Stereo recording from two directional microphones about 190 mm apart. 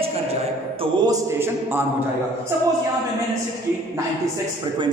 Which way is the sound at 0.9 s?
15° right (ahead or behind).